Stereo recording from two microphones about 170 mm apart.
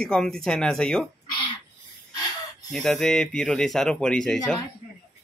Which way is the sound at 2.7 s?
Centre (ahead or behind).